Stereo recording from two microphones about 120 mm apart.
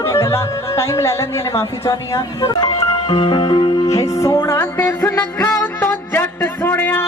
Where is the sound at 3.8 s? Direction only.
25° left (ahead or behind).